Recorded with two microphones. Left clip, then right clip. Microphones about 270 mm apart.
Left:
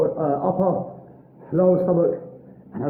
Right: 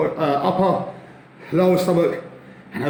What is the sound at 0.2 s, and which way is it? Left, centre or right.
Speech, right.